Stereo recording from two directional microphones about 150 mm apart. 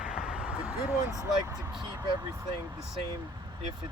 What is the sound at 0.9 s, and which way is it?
Speech, 20° left (ahead or behind).